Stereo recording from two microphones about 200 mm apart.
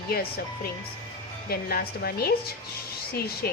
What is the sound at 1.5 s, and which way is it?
Speech, 50° left (ahead or behind).